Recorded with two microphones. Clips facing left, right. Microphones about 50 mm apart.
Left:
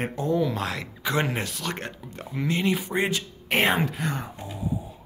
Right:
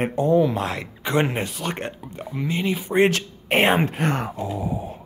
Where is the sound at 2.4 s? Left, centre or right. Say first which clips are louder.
Even; centre.